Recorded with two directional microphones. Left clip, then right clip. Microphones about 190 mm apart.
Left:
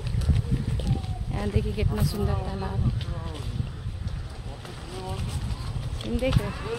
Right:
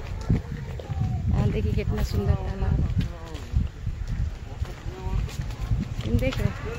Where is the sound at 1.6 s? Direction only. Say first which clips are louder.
Left 1 dB; centre (ahead or behind).